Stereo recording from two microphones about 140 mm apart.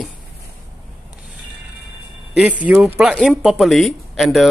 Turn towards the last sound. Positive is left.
turn(degrees=0)  # may be behind; listen again after turning